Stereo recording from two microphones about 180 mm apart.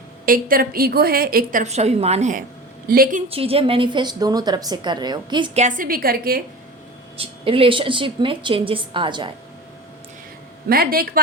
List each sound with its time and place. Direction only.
0.3 s a woman's voice: 50° right (ahead or behind)
2.8 s a woman's voice: 55° right (ahead or behind)
3.2 s a woman's voice: 30° right (ahead or behind)
5.5 s a woman's voice: 45° right (ahead or behind)
7.2 s a woman's voice: 30° right (ahead or behind)
10.7 s a woman's voice: 55° right (ahead or behind)